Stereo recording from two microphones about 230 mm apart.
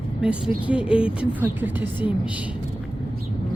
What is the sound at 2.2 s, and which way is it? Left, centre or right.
Speech, centre.